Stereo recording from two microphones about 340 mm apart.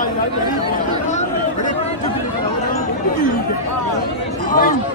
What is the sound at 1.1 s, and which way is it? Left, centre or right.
Chatter, left.